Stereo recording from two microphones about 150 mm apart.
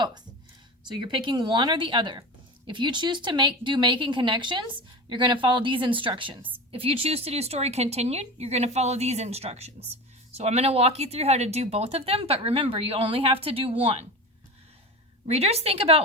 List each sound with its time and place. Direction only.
0.9 s speech: 30° right (ahead or behind)
15.3 s speech: 45° right (ahead or behind)